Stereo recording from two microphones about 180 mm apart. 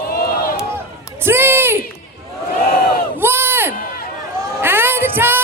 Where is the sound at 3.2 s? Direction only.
10° right (ahead or behind).